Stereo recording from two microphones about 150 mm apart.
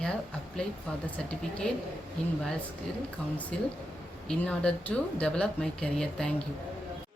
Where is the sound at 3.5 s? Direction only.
5° left (ahead or behind).